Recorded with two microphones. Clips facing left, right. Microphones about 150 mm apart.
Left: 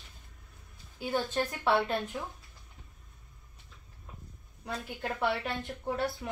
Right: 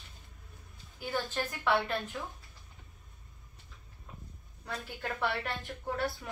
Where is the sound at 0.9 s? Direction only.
20° left (ahead or behind).